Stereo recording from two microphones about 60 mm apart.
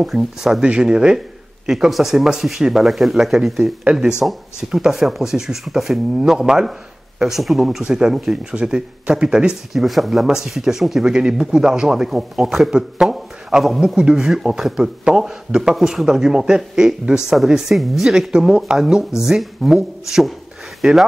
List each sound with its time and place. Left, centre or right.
0.0 s speech: centre
0.7 s speech: centre